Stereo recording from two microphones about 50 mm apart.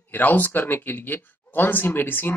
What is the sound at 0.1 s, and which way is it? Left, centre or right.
Speech, left.